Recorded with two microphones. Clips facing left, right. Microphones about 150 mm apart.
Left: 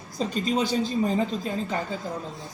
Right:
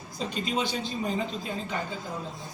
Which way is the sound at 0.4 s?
40° left (ahead or behind).